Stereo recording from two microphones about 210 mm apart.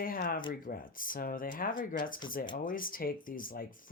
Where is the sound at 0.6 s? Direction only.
40° left (ahead or behind).